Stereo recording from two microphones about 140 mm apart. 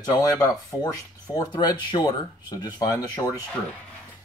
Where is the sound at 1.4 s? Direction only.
30° left (ahead or behind).